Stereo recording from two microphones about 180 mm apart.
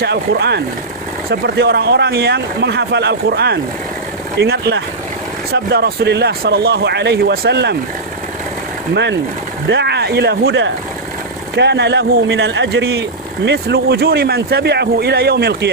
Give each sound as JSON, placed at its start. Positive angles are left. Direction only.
{"t": 0.0, "sound": "speech", "side_deg": -65}
{"t": 9.6, "sound": "speech", "side_deg": -70}